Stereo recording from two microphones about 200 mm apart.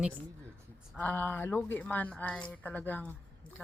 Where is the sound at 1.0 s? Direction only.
10° left (ahead or behind).